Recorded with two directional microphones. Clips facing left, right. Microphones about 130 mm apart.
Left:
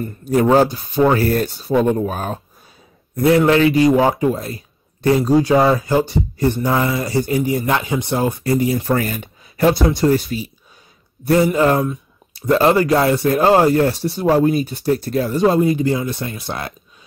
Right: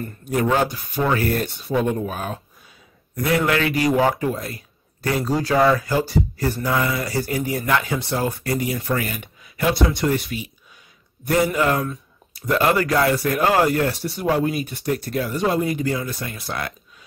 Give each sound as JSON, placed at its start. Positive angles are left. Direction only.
{"t": 0.2, "sound": "speech", "side_deg": 35}